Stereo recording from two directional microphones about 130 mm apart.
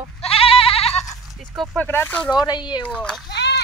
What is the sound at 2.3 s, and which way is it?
Speech, 35° left (ahead or behind).